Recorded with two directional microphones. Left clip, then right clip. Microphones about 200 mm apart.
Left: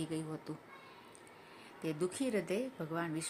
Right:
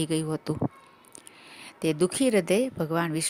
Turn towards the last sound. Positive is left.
turn(degrees=-50)  # may be behind; listen again after turning